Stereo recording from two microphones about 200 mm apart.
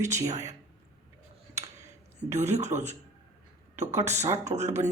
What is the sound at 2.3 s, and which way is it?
Speech, 35° right (ahead or behind).